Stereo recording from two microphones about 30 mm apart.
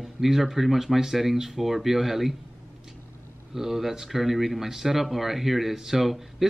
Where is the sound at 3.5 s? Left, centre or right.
Centre.